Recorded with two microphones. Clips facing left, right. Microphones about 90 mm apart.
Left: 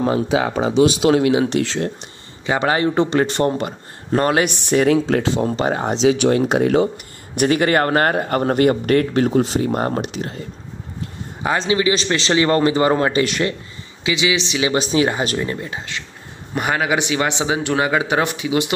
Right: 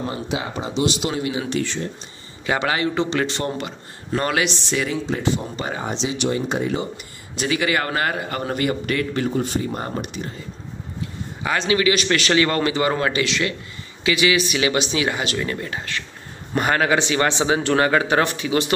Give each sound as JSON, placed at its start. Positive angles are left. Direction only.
{"t": 0.0, "sound": "speech", "side_deg": 90}
{"t": 2.6, "sound": "speech", "side_deg": 35}
{"t": 4.5, "sound": "speech", "side_deg": 50}
{"t": 4.9, "sound": "speech", "side_deg": 80}
{"t": 6.0, "sound": "speech", "side_deg": 90}
{"t": 7.3, "sound": "speech", "side_deg": 45}
{"t": 11.4, "sound": "speech", "side_deg": 30}
{"t": 13.2, "sound": "speech", "side_deg": 45}
{"t": 14.0, "sound": "speech", "side_deg": 20}
{"t": 14.8, "sound": "speech", "side_deg": 35}